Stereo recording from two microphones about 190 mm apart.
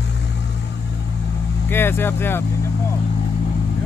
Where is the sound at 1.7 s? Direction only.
10° left (ahead or behind).